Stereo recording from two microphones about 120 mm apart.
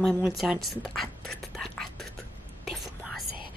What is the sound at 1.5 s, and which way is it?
Whispering, 5° left (ahead or behind).